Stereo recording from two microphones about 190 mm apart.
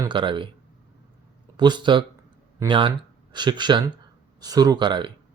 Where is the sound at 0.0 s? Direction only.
25° right (ahead or behind).